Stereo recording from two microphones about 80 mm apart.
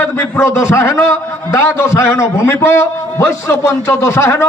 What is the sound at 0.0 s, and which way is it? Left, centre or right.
A man's voice, left.